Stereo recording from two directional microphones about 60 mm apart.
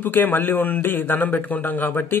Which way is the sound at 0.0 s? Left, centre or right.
Left.